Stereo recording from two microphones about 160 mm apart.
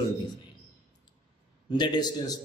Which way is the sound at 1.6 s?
30° left (ahead or behind).